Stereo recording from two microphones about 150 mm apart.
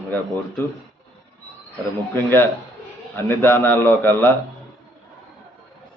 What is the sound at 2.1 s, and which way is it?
A man's voice, 15° left (ahead or behind).